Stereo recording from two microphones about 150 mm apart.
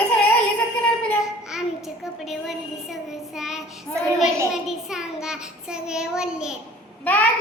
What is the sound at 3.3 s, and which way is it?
Child singing, 5° right (ahead or behind).